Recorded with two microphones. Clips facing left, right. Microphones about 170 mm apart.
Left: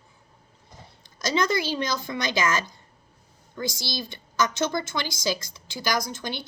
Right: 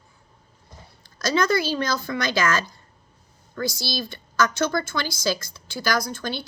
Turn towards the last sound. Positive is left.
turn(degrees=20)  # may be behind; listen again after turning